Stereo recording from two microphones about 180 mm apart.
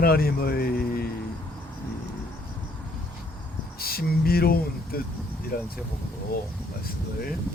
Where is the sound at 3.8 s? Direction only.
55° left (ahead or behind).